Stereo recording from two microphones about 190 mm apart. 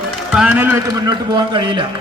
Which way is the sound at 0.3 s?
5° right (ahead or behind).